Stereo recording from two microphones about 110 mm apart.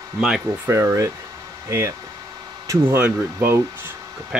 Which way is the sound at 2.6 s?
30° right (ahead or behind).